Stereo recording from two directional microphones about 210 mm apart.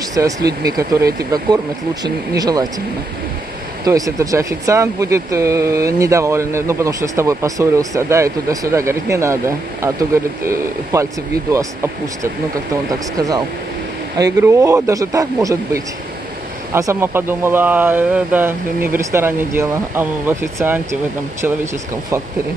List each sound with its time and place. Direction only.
0.1 s speech: 15° right (ahead or behind)
3.8 s speech: 15° right (ahead or behind)
14.1 s speech: 15° right (ahead or behind)